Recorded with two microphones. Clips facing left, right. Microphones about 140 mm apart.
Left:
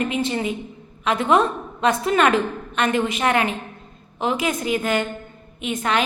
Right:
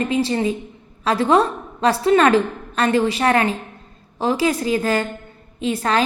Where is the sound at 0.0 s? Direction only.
35° right (ahead or behind).